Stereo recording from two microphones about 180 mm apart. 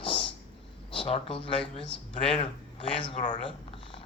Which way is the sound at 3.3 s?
30° left (ahead or behind).